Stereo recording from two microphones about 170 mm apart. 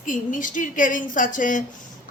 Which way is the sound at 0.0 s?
50° left (ahead or behind).